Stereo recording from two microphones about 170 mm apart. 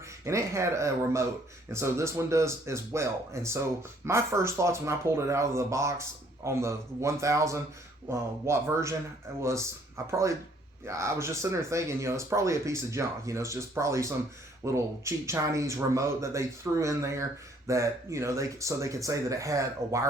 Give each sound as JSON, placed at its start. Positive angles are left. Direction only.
{"t": 0.3, "sound": "speech", "side_deg": -15}